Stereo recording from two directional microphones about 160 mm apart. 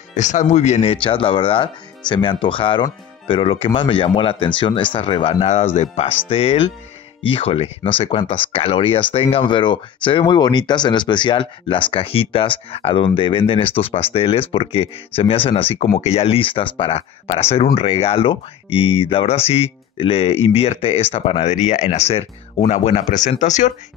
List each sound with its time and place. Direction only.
0.1 s speech: 50° left (ahead or behind)
1.0 s speech: 35° left (ahead or behind); by 23.7 s 50° left (ahead or behind)